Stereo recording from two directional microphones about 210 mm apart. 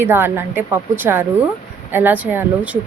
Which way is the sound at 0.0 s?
10° right (ahead or behind).